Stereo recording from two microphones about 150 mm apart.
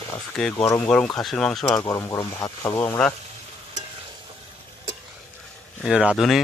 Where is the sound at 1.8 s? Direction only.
20° left (ahead or behind).